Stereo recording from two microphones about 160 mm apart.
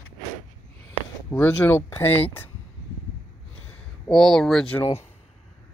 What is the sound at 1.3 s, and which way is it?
Speech, 10° left (ahead or behind).